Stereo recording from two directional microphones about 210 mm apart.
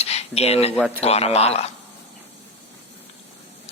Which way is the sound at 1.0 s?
30° left (ahead or behind).